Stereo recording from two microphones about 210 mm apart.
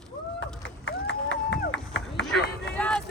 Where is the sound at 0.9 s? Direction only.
60° left (ahead or behind).